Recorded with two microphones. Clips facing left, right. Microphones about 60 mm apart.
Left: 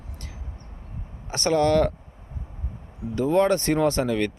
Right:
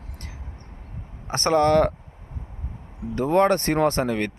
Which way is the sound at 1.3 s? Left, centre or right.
Right.